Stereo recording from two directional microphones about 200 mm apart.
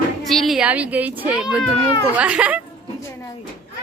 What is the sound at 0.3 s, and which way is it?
A child's voice, centre (ahead or behind).